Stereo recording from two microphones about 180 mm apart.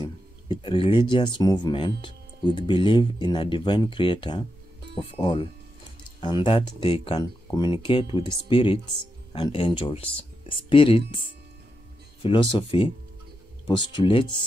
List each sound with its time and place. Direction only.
0.0 s speech: 25° left (ahead or behind)
12.2 s speech: 30° left (ahead or behind)